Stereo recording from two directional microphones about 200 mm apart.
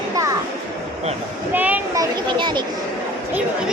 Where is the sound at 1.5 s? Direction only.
10° right (ahead or behind).